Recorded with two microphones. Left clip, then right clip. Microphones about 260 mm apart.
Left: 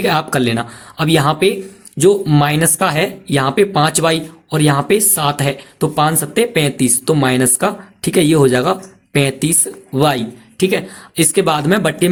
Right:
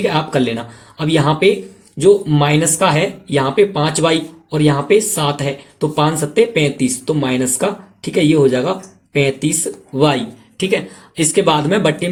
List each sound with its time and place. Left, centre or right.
0.0 s speech: left